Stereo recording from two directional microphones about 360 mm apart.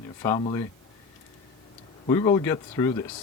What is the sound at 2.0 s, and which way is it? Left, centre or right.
Speech, centre.